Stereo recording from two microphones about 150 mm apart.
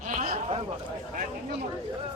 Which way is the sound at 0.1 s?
60° right (ahead or behind).